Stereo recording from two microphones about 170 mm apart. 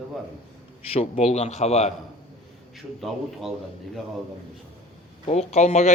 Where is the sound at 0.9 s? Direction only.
35° left (ahead or behind).